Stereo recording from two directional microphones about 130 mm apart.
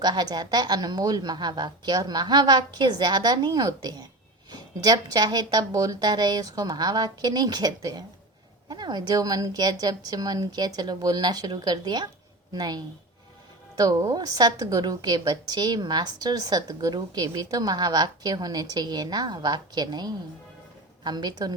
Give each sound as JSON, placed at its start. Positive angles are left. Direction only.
{"t": 0.0, "sound": "a woman's voice", "side_deg": -30}